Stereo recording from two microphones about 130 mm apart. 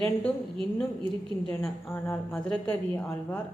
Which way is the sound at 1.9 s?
15° left (ahead or behind).